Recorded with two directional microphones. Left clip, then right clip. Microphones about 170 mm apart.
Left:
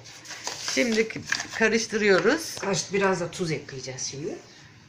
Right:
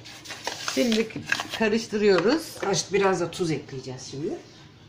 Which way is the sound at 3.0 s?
50° right (ahead or behind).